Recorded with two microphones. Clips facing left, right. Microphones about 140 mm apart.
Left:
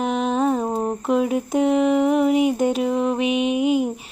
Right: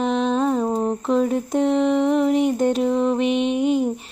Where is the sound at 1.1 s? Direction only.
5° left (ahead or behind).